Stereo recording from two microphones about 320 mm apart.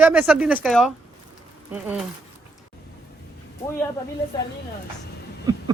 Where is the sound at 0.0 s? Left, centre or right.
Centre.